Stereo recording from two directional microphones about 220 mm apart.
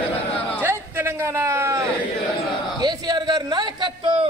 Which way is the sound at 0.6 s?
10° right (ahead or behind).